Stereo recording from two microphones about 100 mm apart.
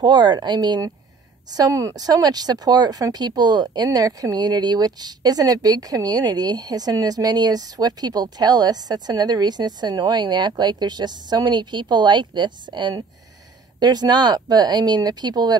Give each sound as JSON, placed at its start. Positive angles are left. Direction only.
{"t": 0.0, "sound": "speech", "side_deg": -45}